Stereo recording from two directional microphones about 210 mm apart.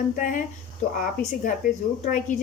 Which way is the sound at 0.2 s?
35° left (ahead or behind).